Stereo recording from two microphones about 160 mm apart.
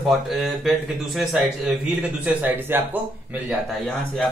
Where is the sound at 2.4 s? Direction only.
15° right (ahead or behind).